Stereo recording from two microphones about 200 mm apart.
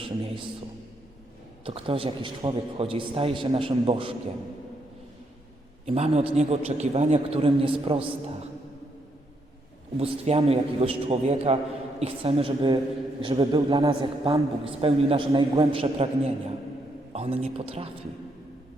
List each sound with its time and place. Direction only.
0.0 s a man's voice: 25° right (ahead or behind)
1.6 s a man's voice: 25° right (ahead or behind)
5.8 s a man's voice: 30° right (ahead or behind)
10.0 s a man's voice: 30° right (ahead or behind)